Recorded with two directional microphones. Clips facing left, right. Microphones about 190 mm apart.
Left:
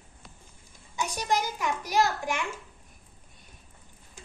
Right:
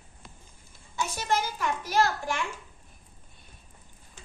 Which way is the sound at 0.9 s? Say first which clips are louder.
Even; 15° left (ahead or behind).